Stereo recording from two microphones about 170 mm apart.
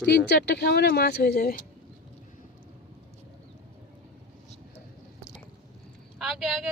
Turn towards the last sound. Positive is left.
turn(degrees=0)  # may be behind; listen again after turning